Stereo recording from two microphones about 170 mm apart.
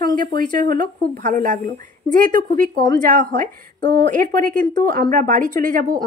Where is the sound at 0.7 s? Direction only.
50° right (ahead or behind).